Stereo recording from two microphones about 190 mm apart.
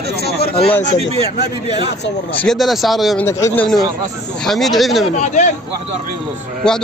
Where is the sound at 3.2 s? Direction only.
15° left (ahead or behind).